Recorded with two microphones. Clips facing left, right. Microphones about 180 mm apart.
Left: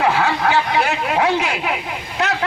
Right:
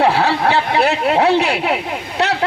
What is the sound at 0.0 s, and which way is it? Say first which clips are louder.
A man's voice: right 3 dB; 30° right (ahead or behind).